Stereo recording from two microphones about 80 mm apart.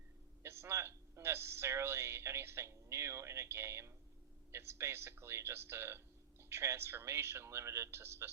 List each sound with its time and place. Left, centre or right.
0.4 s a man's voice: right